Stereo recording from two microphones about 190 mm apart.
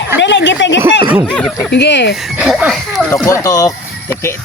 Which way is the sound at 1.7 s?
60° left (ahead or behind).